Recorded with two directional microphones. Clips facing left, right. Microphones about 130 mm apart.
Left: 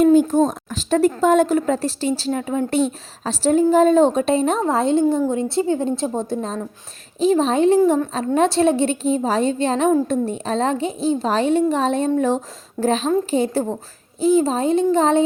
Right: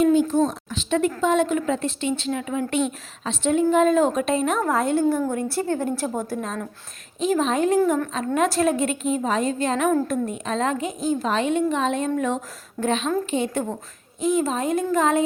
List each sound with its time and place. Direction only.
0.0 s a child's voice: 45° left (ahead or behind); by 15.2 s 30° left (ahead or behind)